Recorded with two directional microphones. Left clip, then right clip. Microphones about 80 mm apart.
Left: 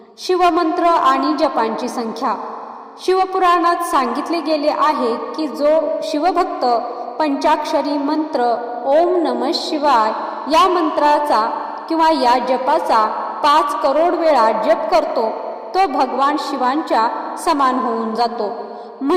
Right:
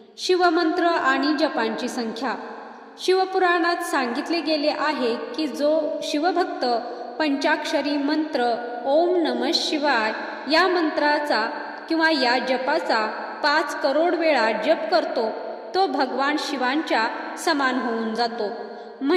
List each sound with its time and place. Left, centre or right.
0.3 s a woman's voice: left